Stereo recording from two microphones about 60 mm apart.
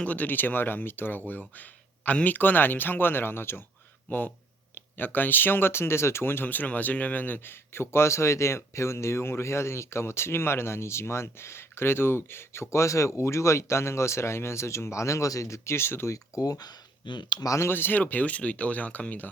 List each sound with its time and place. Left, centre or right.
0.0 s speech: left
4.1 s speech: left
16.1 s speech: left
17.4 s speech: left
17.7 s speech: left
18.0 s speech: left